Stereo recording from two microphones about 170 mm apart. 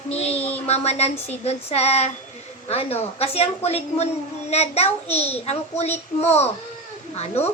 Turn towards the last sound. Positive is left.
turn(degrees=40)  # may be behind; listen again after turning